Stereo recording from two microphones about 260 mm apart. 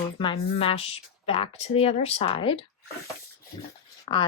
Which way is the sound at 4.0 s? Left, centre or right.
Centre.